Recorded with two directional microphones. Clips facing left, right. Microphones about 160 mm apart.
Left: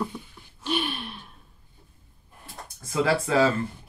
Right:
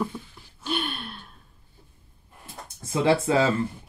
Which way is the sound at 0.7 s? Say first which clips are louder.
Left 1 dB; centre (ahead or behind).